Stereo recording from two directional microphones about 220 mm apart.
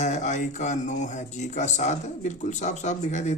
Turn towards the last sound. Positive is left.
turn(degrees=30)  # may be behind; listen again after turning